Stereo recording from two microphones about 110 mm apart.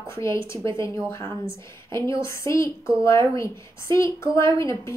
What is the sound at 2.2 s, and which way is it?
A woman's voice, 25° left (ahead or behind).